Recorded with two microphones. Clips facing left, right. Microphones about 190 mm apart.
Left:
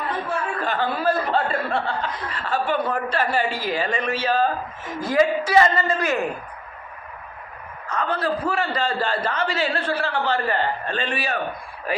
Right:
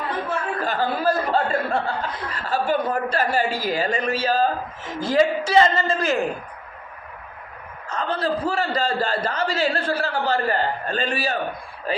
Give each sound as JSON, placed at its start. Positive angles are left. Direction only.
{"t": 0.6, "sound": "a man's voice", "side_deg": -40}
{"t": 7.9, "sound": "speech", "side_deg": -25}